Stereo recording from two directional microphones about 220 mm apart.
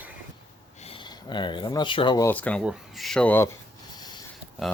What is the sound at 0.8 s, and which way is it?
Speech, 25° left (ahead or behind).